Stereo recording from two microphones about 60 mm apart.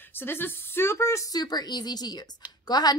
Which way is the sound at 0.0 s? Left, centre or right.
Left.